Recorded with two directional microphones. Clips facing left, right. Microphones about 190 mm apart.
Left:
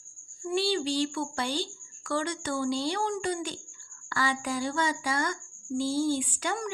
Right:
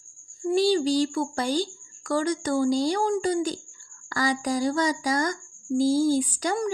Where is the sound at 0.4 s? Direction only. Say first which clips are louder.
Right 7 dB; 40° right (ahead or behind).